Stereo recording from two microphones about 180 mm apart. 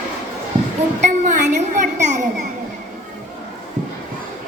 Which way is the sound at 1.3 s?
45° right (ahead or behind).